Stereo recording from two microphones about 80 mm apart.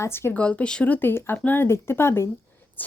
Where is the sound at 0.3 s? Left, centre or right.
Centre.